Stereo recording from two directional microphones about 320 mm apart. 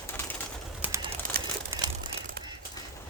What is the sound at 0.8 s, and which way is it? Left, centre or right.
Bird, centre.